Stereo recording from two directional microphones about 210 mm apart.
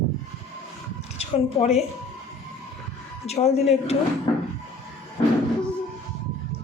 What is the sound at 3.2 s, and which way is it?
Speech, 30° left (ahead or behind).